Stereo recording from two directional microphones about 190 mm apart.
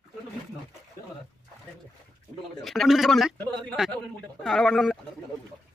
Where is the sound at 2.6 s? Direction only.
Centre (ahead or behind).